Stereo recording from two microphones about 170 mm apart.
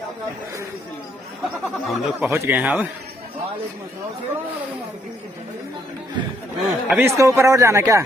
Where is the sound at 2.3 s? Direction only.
15° right (ahead or behind).